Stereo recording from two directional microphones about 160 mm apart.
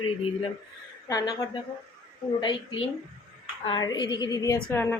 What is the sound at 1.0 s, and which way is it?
Speech, 25° left (ahead or behind).